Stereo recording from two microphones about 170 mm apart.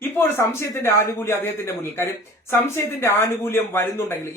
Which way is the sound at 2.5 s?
15° left (ahead or behind).